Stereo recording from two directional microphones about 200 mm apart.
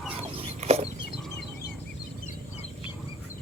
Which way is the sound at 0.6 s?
30° right (ahead or behind).